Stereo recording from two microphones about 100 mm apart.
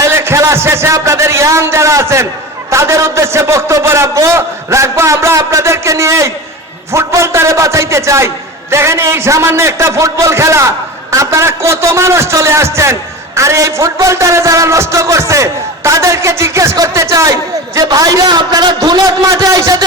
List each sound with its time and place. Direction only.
0.0 s a man's voice: 25° right (ahead or behind)